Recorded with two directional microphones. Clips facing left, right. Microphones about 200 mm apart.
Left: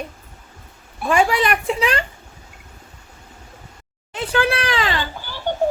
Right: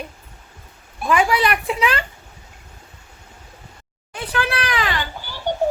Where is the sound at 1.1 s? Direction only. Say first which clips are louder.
Left 1 dB; 35° left (ahead or behind).